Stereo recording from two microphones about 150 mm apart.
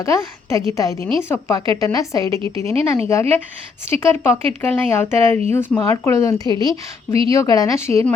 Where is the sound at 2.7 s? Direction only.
40° right (ahead or behind).